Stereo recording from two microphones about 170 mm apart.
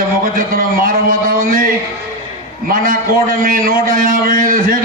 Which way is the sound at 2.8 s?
55° right (ahead or behind).